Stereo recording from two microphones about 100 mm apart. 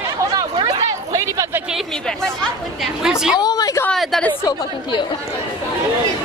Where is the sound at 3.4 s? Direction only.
40° left (ahead or behind).